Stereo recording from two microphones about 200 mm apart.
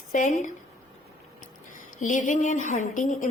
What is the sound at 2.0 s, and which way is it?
A woman's voice, 40° left (ahead or behind).